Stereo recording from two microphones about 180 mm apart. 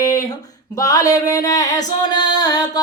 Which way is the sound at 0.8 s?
20° left (ahead or behind).